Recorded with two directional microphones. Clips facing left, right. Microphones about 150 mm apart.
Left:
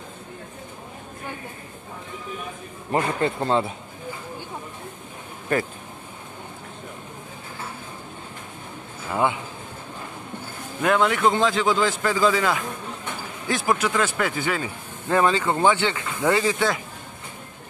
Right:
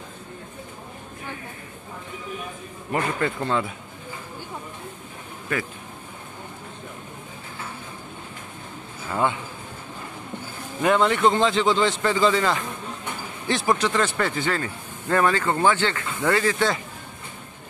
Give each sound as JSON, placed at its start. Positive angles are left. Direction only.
{"t": 2.9, "sound": "speech", "side_deg": 30}
{"t": 9.1, "sound": "speech", "side_deg": 15}
{"t": 10.8, "sound": "a man's voice", "side_deg": 0}
{"t": 16.5, "sound": "a man's voice", "side_deg": 5}